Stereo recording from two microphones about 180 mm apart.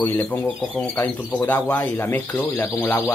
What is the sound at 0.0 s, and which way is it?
Speech, 10° left (ahead or behind).